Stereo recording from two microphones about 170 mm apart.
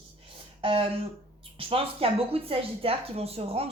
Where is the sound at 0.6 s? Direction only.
30° right (ahead or behind).